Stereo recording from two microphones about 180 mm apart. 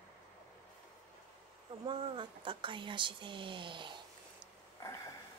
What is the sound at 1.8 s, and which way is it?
Speech, 30° right (ahead or behind).